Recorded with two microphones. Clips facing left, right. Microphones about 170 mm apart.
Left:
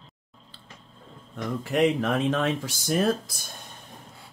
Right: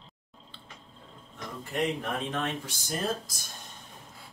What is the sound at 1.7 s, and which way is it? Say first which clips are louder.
Speech: left 8 dB; 90° left.